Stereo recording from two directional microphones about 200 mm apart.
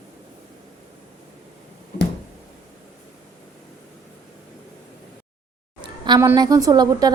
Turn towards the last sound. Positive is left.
turn(degrees=-20)  # may be behind; listen again after turning